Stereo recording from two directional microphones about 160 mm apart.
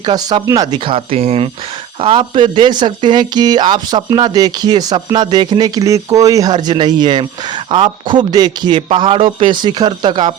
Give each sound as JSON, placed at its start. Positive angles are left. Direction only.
{"t": 0.0, "sound": "speech", "side_deg": -25}